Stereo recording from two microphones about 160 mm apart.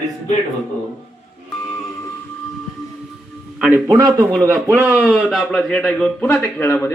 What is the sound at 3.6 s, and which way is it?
A man's voice, 10° right (ahead or behind).